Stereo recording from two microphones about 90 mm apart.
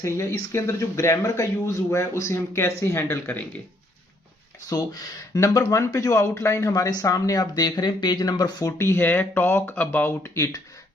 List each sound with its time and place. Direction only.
0.0 s speech: 30° left (ahead or behind)
4.7 s speech: 45° left (ahead or behind)
8.8 s speech: 25° left (ahead or behind)